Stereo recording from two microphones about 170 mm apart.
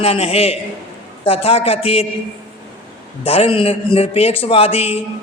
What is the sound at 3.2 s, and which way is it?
A man's voice, 35° left (ahead or behind).